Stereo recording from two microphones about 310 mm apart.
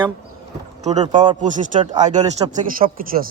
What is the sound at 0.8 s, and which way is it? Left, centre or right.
Speech, right.